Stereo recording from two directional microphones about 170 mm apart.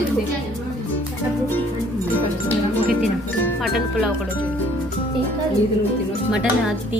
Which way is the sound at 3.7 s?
5° right (ahead or behind).